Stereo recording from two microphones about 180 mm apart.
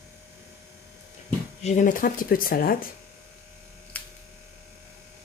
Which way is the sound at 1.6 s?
45° left (ahead or behind).